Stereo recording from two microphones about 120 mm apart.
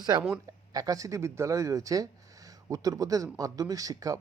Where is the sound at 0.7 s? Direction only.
30° right (ahead or behind).